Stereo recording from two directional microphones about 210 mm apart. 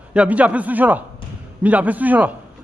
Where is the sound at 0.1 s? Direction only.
5° right (ahead or behind).